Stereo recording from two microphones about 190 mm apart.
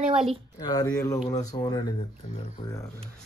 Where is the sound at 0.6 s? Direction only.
20° left (ahead or behind).